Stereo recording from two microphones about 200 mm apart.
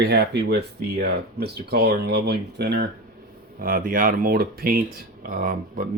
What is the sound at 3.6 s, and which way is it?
Speech, 45° right (ahead or behind).